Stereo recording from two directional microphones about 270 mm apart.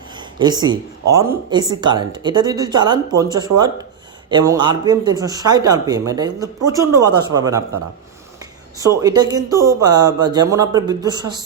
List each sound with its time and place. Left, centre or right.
0.1 s speech: centre
9.0 s speech: centre